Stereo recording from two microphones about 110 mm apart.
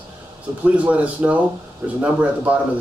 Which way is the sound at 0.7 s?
15° right (ahead or behind).